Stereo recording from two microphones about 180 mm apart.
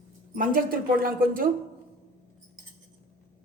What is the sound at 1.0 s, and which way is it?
Speech, 50° right (ahead or behind).